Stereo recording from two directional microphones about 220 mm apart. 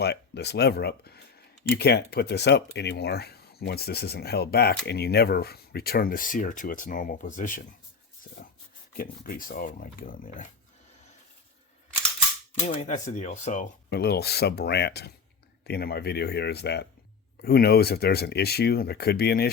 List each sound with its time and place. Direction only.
0.0 s speech: 50° left (ahead or behind)
9.0 s speech: 40° left (ahead or behind)
12.6 s speech: 30° left (ahead or behind)
13.9 s speech: 50° left (ahead or behind)